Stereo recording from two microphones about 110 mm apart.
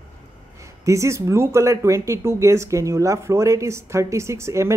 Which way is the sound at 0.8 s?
25° right (ahead or behind).